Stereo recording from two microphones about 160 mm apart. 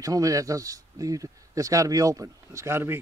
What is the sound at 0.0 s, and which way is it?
Speech, 20° right (ahead or behind).